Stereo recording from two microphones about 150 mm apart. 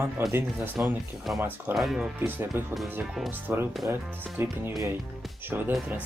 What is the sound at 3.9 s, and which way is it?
Speech, 15° right (ahead or behind).